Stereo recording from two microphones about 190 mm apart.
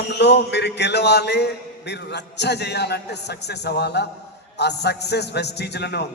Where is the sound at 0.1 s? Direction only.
65° left (ahead or behind).